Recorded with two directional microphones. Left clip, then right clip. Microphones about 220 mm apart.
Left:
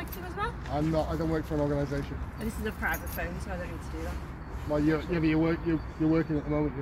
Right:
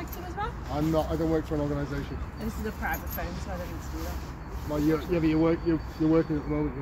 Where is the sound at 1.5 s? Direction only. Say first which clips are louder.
Even; 40° left (ahead or behind).